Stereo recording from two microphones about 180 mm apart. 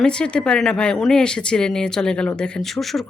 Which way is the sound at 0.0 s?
5° left (ahead or behind).